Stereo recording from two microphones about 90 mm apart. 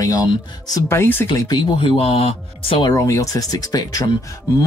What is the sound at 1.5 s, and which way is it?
Speech, 75° left (ahead or behind).